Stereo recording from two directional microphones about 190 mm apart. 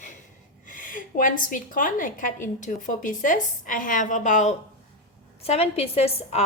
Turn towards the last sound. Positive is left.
turn(degrees=30)  # may be behind; listen again after turning